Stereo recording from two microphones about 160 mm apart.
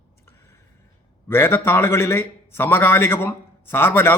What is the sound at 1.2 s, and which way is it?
A man's voice, 15° left (ahead or behind).